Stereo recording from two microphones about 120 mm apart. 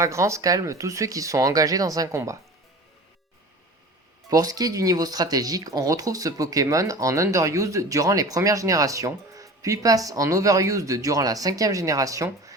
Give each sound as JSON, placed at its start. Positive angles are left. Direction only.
{"t": 0.0, "sound": "speech", "side_deg": -25}
{"t": 4.3, "sound": "speech", "side_deg": -30}